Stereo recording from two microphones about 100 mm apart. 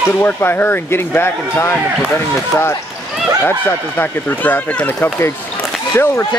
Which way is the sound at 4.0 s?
20° left (ahead or behind).